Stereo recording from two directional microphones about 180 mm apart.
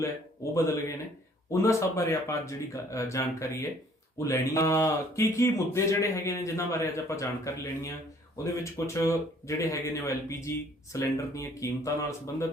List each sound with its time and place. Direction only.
0.5 s speech: 15° left (ahead or behind)